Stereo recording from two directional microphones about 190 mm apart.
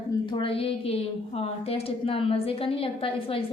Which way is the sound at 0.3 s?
25° left (ahead or behind).